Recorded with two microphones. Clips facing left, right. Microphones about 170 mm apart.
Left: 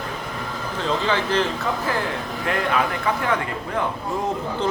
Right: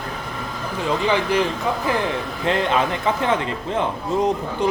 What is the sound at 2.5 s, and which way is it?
A man's voice, 25° right (ahead or behind).